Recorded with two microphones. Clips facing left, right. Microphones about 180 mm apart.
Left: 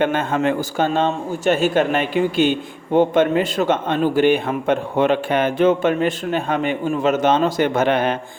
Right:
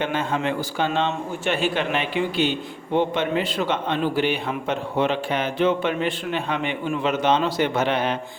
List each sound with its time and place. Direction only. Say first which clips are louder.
0.0 s a man's voice: left 5 dB; 55° left (ahead or behind)